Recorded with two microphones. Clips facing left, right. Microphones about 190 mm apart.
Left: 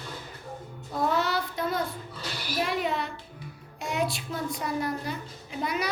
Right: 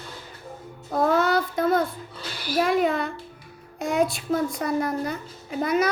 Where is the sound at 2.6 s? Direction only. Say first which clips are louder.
Right 7 dB; 50° right (ahead or behind).